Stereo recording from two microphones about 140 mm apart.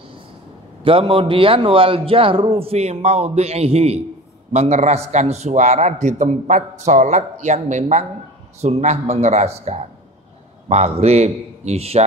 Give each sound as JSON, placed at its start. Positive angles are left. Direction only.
{"t": 0.8, "sound": "a man's voice", "side_deg": -40}